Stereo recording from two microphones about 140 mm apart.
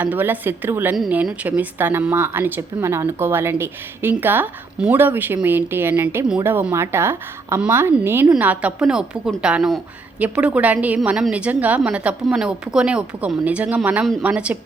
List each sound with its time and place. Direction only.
0.0 s a woman's voice: 15° right (ahead or behind)